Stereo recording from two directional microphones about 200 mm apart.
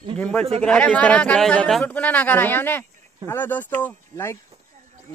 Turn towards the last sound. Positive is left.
turn(degrees=10)  # may be behind; listen again after turning